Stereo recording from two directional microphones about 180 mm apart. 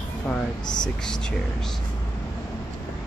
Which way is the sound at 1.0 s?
5° left (ahead or behind).